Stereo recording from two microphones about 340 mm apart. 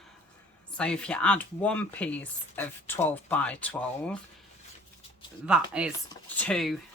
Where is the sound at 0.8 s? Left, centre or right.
Centre.